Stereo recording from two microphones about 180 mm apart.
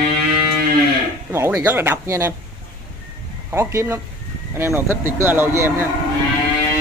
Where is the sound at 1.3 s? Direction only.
15° right (ahead or behind).